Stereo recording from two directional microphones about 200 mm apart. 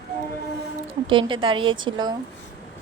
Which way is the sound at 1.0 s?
25° right (ahead or behind).